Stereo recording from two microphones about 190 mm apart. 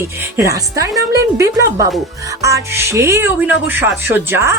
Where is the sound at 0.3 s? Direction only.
15° right (ahead or behind).